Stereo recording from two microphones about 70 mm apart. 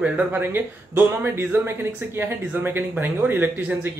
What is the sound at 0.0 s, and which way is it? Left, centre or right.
Speech, right.